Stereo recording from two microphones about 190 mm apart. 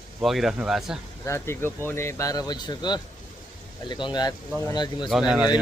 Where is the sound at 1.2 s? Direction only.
15° left (ahead or behind).